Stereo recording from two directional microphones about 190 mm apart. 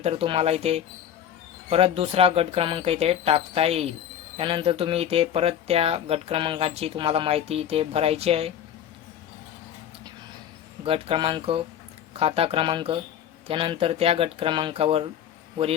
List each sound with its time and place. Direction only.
0.0 s speech: 30° right (ahead or behind)
10.8 s speech: 30° right (ahead or behind)